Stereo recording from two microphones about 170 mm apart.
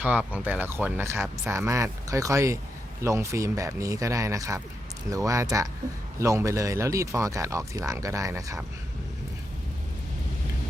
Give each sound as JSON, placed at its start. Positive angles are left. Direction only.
{"t": 0.0, "sound": "speech", "side_deg": -10}